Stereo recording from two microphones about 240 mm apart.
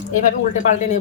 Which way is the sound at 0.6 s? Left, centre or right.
Left.